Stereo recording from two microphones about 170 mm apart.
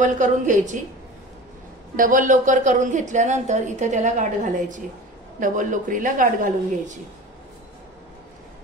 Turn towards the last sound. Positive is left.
turn(degrees=-50)  # may be behind; listen again after turning